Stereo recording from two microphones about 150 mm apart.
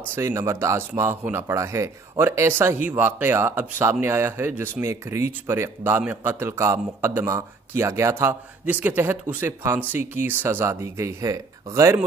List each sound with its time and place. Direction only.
0.1 s speech: 20° right (ahead or behind)